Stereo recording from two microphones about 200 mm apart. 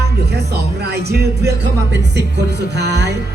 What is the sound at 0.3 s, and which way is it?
Speech, 55° right (ahead or behind).